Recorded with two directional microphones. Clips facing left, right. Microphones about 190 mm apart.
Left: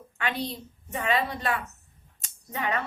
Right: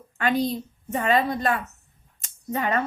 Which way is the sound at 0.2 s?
40° right (ahead or behind).